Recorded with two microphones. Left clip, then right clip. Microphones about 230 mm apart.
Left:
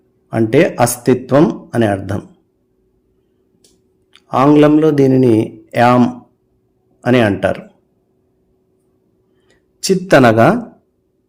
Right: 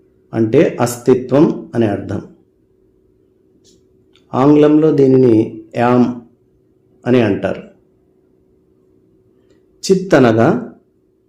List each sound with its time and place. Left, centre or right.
0.3 s a man's voice: left
4.1 s a man's voice: left
9.5 s speech: left